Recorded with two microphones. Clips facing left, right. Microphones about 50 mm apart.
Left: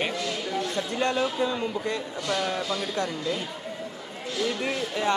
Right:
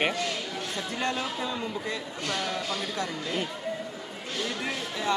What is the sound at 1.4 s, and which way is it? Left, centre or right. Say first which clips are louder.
Speech: left 5 dB; centre.